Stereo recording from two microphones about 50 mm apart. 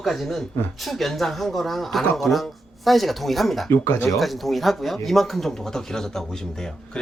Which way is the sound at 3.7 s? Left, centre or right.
Left.